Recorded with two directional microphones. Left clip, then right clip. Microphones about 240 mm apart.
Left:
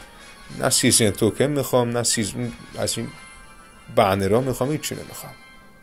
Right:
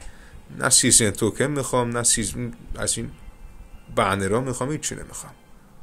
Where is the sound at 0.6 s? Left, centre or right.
Centre.